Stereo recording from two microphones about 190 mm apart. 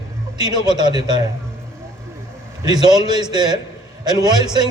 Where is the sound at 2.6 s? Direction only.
20° right (ahead or behind).